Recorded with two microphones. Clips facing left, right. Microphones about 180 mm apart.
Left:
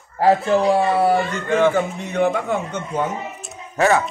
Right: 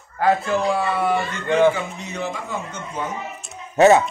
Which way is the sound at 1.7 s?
55° left (ahead or behind).